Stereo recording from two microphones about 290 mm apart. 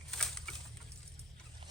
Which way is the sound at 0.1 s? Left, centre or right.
Centre.